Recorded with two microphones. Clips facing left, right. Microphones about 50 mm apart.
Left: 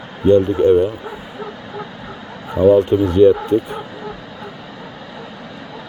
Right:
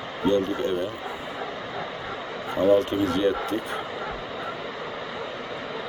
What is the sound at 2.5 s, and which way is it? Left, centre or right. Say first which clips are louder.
Speech: left 8 dB; centre.